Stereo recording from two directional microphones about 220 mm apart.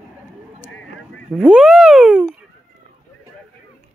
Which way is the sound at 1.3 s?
5° right (ahead or behind).